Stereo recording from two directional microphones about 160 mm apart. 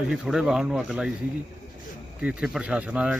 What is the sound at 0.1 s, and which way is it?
Speech, 5° right (ahead or behind).